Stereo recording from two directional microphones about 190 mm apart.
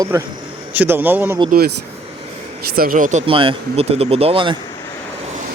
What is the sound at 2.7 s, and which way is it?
Speech, 50° right (ahead or behind).